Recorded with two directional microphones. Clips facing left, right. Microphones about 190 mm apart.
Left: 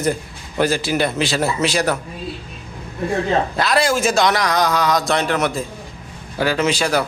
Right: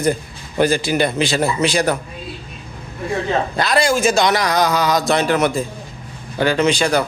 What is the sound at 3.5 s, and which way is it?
A man's voice, centre (ahead or behind).